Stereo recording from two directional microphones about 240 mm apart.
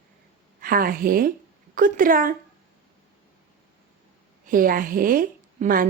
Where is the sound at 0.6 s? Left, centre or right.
Right.